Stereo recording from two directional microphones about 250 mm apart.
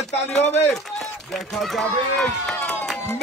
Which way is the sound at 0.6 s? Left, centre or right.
Centre.